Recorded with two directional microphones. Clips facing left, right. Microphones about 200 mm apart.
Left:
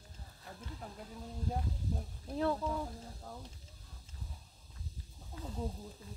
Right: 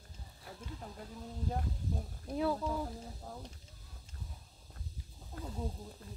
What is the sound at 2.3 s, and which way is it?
Speech, centre (ahead or behind).